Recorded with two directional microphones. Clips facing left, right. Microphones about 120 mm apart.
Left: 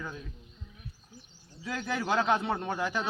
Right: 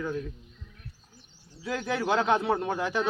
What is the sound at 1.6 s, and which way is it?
A man's voice, 10° right (ahead or behind).